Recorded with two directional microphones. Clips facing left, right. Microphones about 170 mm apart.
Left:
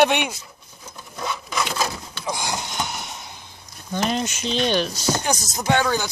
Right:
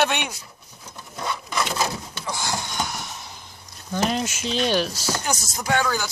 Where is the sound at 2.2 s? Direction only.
15° left (ahead or behind).